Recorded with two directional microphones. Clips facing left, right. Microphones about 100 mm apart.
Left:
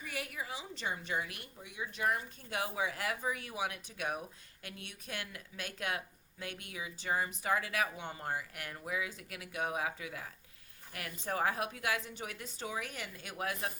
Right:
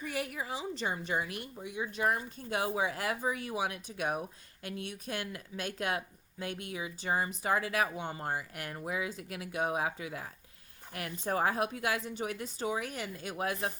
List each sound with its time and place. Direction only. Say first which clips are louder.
0.1 s a woman's voice: right 3 dB; 35° right (ahead or behind)